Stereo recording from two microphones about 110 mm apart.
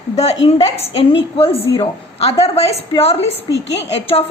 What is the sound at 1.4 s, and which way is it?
A woman's voice, 65° left (ahead or behind).